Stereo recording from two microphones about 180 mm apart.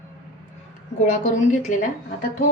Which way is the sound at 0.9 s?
45° left (ahead or behind).